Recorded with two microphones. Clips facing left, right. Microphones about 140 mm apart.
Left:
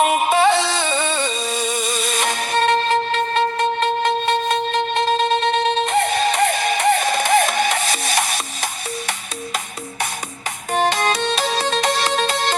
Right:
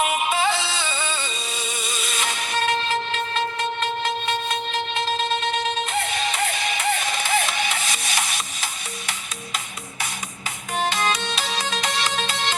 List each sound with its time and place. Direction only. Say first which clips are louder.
0.0 s music: left 6 dB; 40° left (ahead or behind)
0.3 s music: left 7 dB; 55° left (ahead or behind)
1.5 s music: left 8 dB; 40° left (ahead or behind)
2.6 s music: left 6 dB; 50° left (ahead or behind)
10.9 s music: left 4 dB; 40° left (ahead or behind)
11.2 s music: left 7 dB; 50° left (ahead or behind)
11.6 s music: left 7 dB; 55° left (ahead or behind)
11.9 s music: left 6 dB; 40° left (ahead or behind)